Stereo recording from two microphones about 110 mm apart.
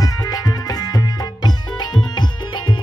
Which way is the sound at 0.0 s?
35° left (ahead or behind).